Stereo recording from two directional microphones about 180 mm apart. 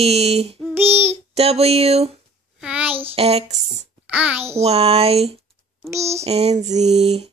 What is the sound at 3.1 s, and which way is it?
Child singing, 35° right (ahead or behind).